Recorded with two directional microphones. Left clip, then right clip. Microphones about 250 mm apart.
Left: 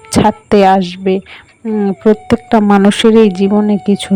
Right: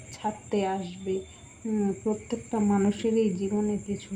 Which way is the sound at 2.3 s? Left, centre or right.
Left.